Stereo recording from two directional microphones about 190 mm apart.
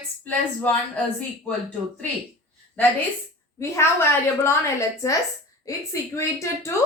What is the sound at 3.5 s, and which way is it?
A woman's voice, 15° left (ahead or behind).